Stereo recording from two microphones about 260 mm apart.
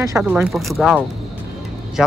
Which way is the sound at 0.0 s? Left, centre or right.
Centre.